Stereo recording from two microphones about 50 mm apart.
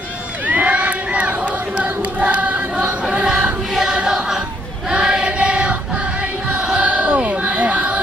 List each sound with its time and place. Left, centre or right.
0.5 s crowd: right
1.8 s choir: right
3.3 s choir: centre
6.5 s music: right